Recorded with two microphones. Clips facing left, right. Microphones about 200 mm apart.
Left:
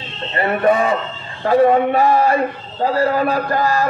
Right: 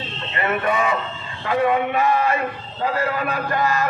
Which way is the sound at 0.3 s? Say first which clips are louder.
Left 6 dB; 35° left (ahead or behind).